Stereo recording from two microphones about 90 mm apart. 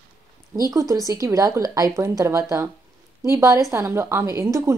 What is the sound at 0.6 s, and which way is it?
A woman's voice, 40° right (ahead or behind).